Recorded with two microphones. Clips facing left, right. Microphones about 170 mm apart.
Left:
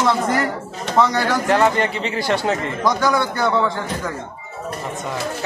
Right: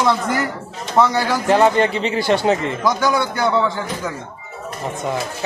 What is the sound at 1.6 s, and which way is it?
Speech, 25° right (ahead or behind).